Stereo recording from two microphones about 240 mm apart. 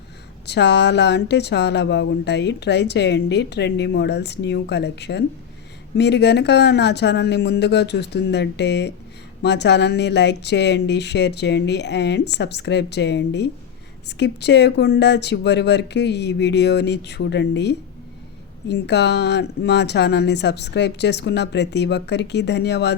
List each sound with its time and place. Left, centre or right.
0.4 s speech: left